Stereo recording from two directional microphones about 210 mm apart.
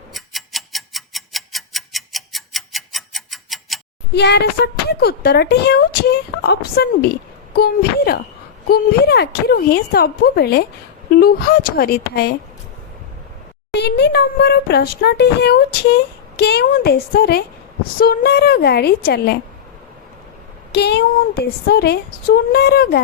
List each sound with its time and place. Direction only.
0.1 s tick-tock: centre (ahead or behind)
4.1 s speech: 55° left (ahead or behind)
13.7 s speech: 55° left (ahead or behind)
20.7 s speech: 50° left (ahead or behind)